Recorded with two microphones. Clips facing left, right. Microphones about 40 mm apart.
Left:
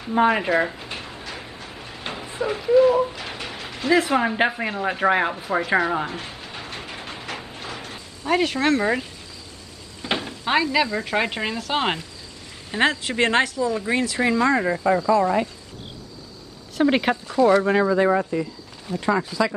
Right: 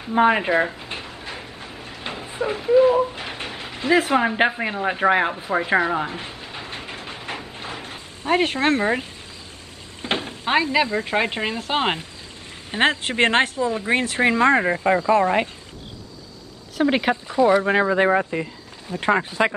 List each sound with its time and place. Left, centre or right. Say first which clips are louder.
0.0 s speech: right 1 dB; centre
1.8 s a sound: right 1 dB; right
2.0 s a sound: even; centre
3.6 s speech: right 1 dB; centre
6.4 s train: right 1 dB; centre
7.5 s a sound: right 1 dB; right
10.0 s speech: right 1 dB; right
16.7 s a woman's voice: even; centre
17.3 s speech: even; centre
17.6 s speech: even; right